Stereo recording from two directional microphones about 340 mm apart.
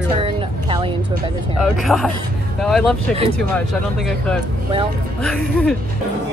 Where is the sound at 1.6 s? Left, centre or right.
Centre.